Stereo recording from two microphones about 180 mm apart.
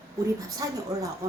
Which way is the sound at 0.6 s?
20° right (ahead or behind).